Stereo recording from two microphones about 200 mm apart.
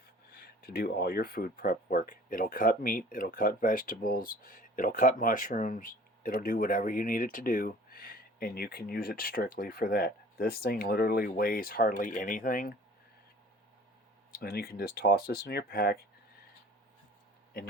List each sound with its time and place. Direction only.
0.3 s speech: 50° left (ahead or behind)
14.3 s speech: 50° left (ahead or behind)